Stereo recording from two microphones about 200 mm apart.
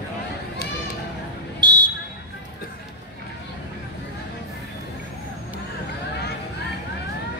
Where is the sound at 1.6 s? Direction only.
20° right (ahead or behind).